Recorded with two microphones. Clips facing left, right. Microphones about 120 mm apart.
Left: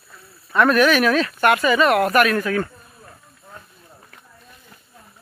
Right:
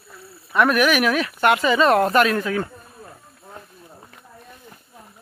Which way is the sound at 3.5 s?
15° right (ahead or behind).